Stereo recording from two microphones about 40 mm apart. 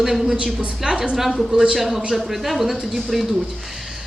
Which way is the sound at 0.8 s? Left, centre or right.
Right.